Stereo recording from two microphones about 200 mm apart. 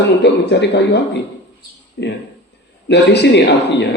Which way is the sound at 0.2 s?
55° left (ahead or behind).